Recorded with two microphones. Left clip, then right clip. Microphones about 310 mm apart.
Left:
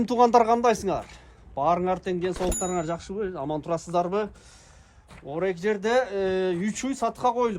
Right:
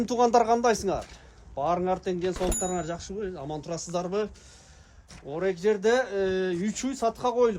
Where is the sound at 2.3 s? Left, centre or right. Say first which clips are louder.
Left 1 dB; centre.